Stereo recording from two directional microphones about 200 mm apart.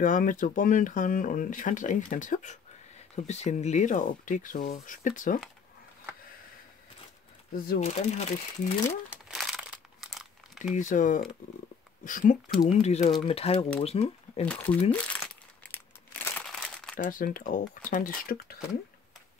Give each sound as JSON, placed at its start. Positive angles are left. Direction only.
{"t": 0.0, "sound": "speech", "side_deg": 40}
{"t": 7.5, "sound": "speech", "side_deg": 50}
{"t": 7.8, "sound": "speech", "side_deg": 35}
{"t": 9.1, "sound": "crumpling", "side_deg": 0}
{"t": 10.7, "sound": "speech", "side_deg": 40}
{"t": 14.4, "sound": "speech", "side_deg": 5}
{"t": 14.9, "sound": "crumpling", "side_deg": 5}
{"t": 16.9, "sound": "speech", "side_deg": 45}